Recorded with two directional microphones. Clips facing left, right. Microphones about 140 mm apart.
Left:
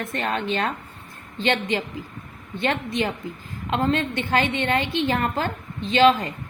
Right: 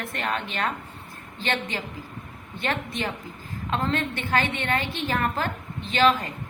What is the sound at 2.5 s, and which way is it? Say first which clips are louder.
A woman's voice: left 5 dB; 20° left (ahead or behind).